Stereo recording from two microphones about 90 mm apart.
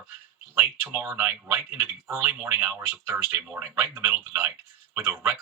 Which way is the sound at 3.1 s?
25° right (ahead or behind).